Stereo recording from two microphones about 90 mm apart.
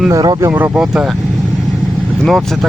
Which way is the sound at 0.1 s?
40° right (ahead or behind).